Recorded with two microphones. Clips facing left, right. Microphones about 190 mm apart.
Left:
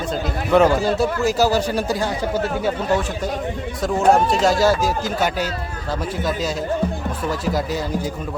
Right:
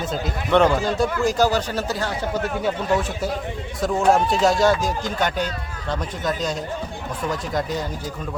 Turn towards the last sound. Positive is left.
turn(degrees=5)  # may be behind; listen again after turning